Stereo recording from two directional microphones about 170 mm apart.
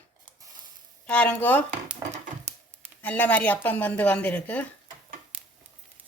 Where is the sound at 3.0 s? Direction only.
10° left (ahead or behind).